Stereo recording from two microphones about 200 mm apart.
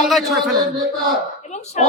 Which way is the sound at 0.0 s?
Centre (ahead or behind).